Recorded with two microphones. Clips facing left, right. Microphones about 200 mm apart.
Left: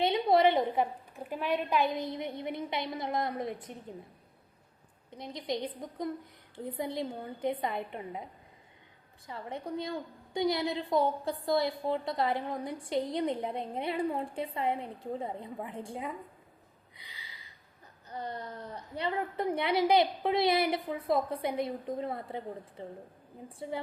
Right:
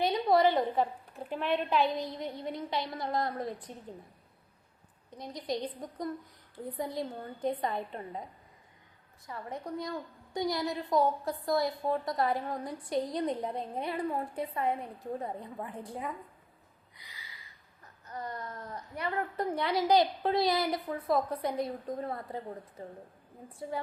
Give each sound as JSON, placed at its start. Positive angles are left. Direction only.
{"t": 0.0, "sound": "a sound", "side_deg": 25}
{"t": 1.1, "sound": "a woman's voice", "side_deg": 5}
{"t": 2.0, "sound": "a woman's voice", "side_deg": 20}
{"t": 5.1, "sound": "a woman's voice", "side_deg": 25}
{"t": 6.7, "sound": "a woman's voice", "side_deg": 25}
{"t": 7.3, "sound": "a woman's voice", "side_deg": 10}
{"t": 9.2, "sound": "a woman's voice", "side_deg": 25}
{"t": 18.1, "sound": "a woman's voice", "side_deg": 30}
{"t": 23.5, "sound": "a woman's voice", "side_deg": 30}